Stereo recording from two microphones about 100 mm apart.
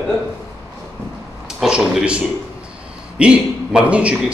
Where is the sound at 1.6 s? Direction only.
5° right (ahead or behind).